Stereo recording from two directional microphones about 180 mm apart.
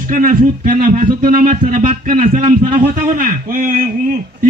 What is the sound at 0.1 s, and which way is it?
Speech, 50° right (ahead or behind).